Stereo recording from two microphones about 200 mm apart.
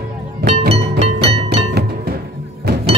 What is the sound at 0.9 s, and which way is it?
Music, 35° right (ahead or behind).